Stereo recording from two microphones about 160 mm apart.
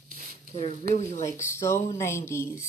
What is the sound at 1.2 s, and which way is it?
Speech, 15° left (ahead or behind).